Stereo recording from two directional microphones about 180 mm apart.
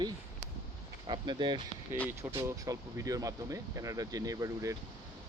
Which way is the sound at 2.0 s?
15° right (ahead or behind).